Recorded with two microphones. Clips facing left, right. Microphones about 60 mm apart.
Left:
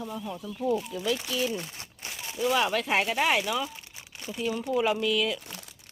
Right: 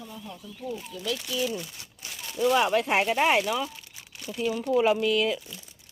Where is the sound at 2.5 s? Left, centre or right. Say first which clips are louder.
Right 2 dB; centre.